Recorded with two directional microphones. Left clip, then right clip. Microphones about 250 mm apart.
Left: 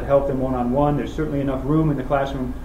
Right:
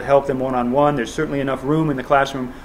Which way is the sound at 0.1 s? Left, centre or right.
Right.